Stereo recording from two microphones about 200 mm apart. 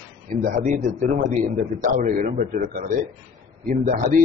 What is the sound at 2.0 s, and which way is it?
A man's voice, 40° right (ahead or behind).